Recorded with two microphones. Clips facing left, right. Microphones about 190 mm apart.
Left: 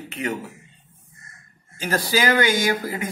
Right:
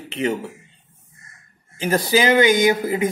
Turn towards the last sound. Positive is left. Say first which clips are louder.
# right 5 dB
turn(degrees=-20)  # may be behind; listen again after turning